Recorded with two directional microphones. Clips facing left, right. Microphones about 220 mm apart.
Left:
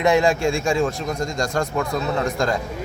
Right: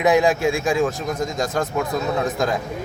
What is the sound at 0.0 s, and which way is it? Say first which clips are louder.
Speech: right 1 dB; centre (ahead or behind).